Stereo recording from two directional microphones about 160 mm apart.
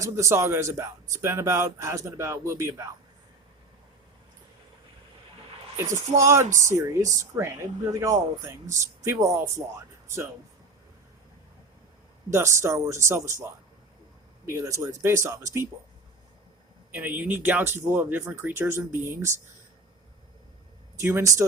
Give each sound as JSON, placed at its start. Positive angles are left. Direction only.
{"t": 0.0, "sound": "speech", "side_deg": -20}
{"t": 6.1, "sound": "speech", "side_deg": -20}
{"t": 12.3, "sound": "speech", "side_deg": -15}
{"t": 16.9, "sound": "speech", "side_deg": -10}
{"t": 21.0, "sound": "speech", "side_deg": -15}